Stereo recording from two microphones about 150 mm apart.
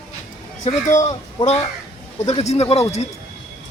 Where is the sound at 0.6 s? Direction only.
50° left (ahead or behind).